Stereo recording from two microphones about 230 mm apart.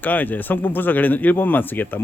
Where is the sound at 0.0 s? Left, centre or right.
Centre.